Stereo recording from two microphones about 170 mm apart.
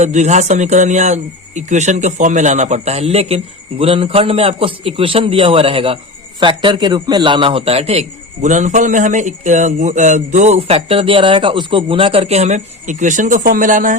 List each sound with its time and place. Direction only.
0.0 s a man's voice: 45° right (ahead or behind)